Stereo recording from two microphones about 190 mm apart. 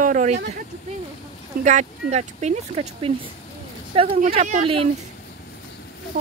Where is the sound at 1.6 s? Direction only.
40° right (ahead or behind).